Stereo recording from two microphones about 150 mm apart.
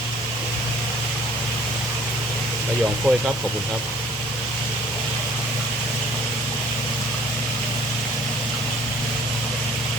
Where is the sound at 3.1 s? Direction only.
10° left (ahead or behind).